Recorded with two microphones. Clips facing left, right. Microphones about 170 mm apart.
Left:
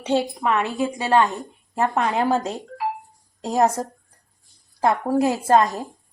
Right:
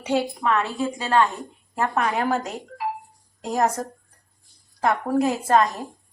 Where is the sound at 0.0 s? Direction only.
25° left (ahead or behind).